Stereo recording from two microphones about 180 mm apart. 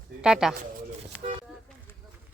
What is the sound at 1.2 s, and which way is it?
Vehicle, 35° right (ahead or behind).